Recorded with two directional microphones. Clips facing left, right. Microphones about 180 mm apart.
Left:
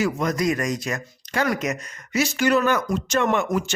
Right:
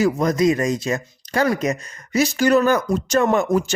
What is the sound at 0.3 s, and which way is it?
Speech, 25° right (ahead or behind).